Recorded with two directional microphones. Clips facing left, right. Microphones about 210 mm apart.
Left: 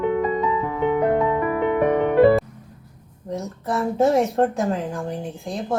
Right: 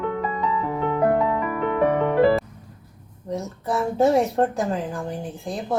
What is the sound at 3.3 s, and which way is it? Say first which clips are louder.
Speech: even; centre (ahead or behind).